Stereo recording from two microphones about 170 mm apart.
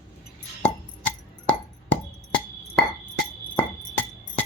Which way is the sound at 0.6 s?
10° left (ahead or behind).